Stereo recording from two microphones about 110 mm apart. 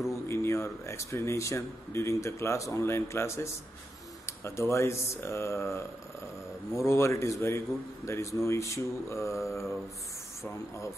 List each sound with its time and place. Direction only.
0.1 s a man's voice: 25° left (ahead or behind)